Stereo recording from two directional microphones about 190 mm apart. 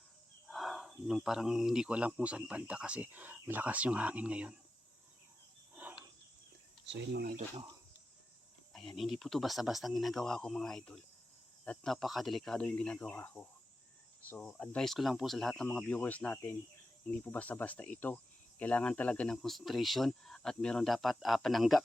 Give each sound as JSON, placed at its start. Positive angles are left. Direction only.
{"t": 0.4, "sound": "speech", "side_deg": 0}
{"t": 5.7, "sound": "cricket", "side_deg": -10}
{"t": 6.8, "sound": "speech", "side_deg": -70}
{"t": 8.7, "sound": "speech", "side_deg": 0}
{"t": 17.1, "sound": "cricket", "side_deg": 10}
{"t": 18.6, "sound": "speech", "side_deg": 5}